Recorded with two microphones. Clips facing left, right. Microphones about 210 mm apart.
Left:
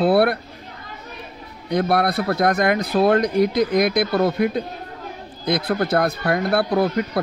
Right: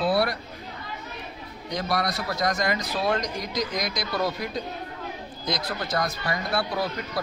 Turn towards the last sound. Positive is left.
turn(degrees=55)  # may be behind; listen again after turning